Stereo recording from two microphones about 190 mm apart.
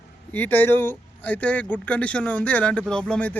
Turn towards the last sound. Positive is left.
turn(degrees=5)  # may be behind; listen again after turning